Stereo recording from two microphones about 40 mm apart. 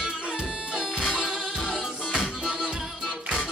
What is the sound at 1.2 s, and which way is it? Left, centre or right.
Music, centre.